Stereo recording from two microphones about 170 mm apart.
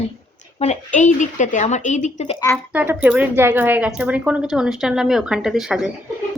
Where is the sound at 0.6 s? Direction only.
45° left (ahead or behind).